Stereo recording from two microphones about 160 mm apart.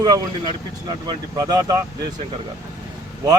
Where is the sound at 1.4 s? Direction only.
20° right (ahead or behind).